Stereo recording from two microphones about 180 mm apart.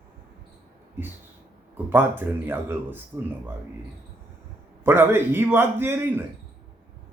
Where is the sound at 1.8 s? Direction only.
10° right (ahead or behind).